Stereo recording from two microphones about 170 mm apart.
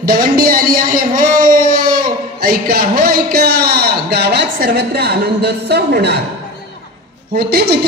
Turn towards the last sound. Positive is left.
turn(degrees=-65)  # may be behind; listen again after turning